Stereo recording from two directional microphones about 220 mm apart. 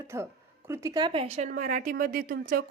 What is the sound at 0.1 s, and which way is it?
Speech, 10° right (ahead or behind).